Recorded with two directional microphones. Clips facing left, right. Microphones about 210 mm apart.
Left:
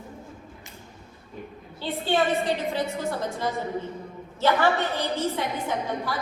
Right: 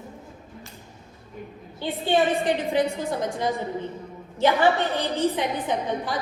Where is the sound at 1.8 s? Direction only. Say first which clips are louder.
Right 2 dB; 15° right (ahead or behind).